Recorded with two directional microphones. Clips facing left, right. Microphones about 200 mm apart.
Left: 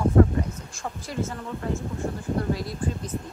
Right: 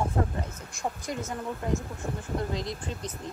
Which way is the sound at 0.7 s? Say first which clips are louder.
Left 1 dB; 20° right (ahead or behind).